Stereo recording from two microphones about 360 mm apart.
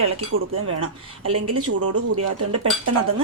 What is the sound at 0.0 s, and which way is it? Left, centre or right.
Speech, right.